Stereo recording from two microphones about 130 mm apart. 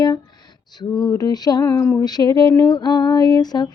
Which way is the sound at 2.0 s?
30° left (ahead or behind).